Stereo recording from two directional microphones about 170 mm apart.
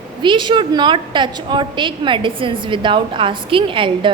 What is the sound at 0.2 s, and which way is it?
A woman's voice, 30° right (ahead or behind).